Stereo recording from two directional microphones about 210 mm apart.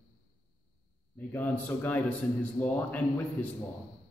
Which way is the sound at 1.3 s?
10° left (ahead or behind).